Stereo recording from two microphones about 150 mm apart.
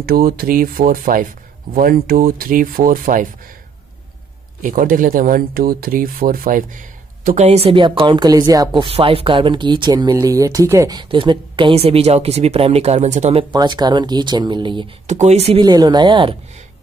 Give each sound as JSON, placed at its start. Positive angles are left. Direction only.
{"t": 0.0, "sound": "speech", "side_deg": -90}
{"t": 4.6, "sound": "speech", "side_deg": -65}
{"t": 8.8, "sound": "speech", "side_deg": -40}
{"t": 13.6, "sound": "speech", "side_deg": -30}
{"t": 15.0, "sound": "speech", "side_deg": -50}
{"t": 15.6, "sound": "speech", "side_deg": -25}